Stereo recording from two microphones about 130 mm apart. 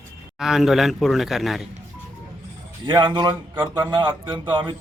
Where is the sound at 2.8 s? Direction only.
35° right (ahead or behind).